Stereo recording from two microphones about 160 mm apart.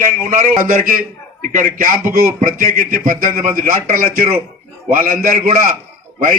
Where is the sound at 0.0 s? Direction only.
55° right (ahead or behind).